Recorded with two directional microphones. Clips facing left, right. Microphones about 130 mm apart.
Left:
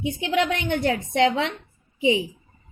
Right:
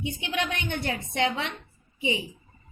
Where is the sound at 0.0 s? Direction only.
90° left.